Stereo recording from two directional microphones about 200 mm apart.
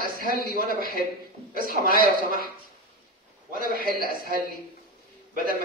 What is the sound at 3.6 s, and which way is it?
Speech, 45° right (ahead or behind).